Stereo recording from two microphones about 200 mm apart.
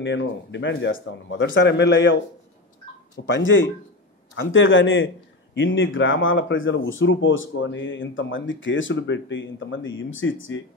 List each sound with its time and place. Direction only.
0.0 s a man's voice: 65° left (ahead or behind)
3.3 s a man's voice: 70° left (ahead or behind)